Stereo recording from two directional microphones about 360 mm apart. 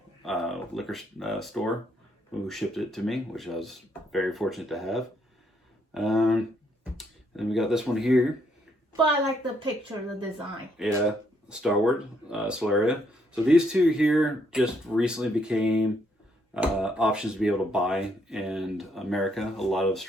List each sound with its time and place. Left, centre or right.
0.3 s speech: centre
8.9 s a woman's voice: centre
10.8 s speech: centre